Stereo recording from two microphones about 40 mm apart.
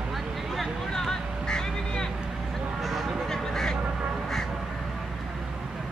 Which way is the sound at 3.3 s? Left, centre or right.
Centre.